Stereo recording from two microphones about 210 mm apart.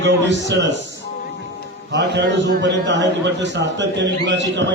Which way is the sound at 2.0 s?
55° right (ahead or behind).